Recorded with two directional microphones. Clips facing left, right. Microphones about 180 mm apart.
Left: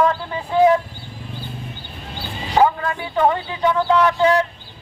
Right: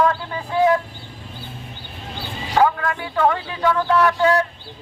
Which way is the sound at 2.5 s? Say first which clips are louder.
Left 1 dB; 20° left (ahead or behind).